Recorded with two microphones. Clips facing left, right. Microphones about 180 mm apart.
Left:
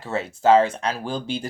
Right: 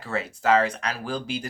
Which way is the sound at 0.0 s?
25° left (ahead or behind).